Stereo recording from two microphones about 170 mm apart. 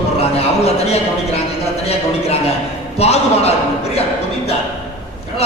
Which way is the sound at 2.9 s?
35° left (ahead or behind).